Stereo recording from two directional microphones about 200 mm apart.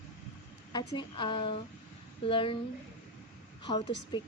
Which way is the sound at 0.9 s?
25° left (ahead or behind).